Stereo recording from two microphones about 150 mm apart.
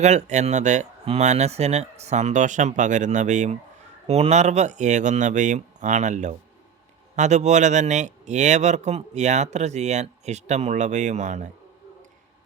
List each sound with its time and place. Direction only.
0.0 s speech: 50° right (ahead or behind)
4.0 s speech: 45° right (ahead or behind)